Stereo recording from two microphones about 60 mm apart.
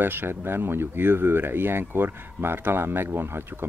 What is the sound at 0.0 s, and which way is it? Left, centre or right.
Speech, right.